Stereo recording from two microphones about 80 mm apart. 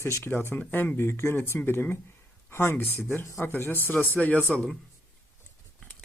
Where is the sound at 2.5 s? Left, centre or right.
Left.